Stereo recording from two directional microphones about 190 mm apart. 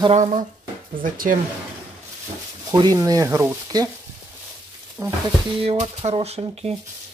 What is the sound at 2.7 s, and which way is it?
Speech, 20° right (ahead or behind).